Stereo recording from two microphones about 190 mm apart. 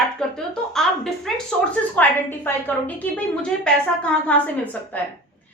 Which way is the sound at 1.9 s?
10° left (ahead or behind).